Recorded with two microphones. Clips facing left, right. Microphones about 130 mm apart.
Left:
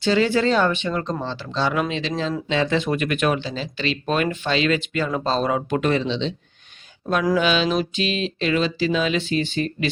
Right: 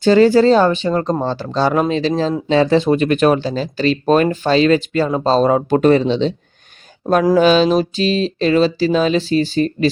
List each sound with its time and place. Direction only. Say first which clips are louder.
0.0 s speech: right 9 dB; 45° right (ahead or behind)
7.0 s mantra: right 8 dB; 45° right (ahead or behind)
7.3 s speech: right 8 dB; 40° right (ahead or behind)